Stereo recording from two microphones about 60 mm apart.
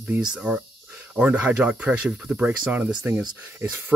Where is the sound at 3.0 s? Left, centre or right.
Right.